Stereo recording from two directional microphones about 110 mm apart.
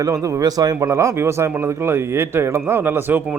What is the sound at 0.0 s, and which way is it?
Speech, 30° right (ahead or behind).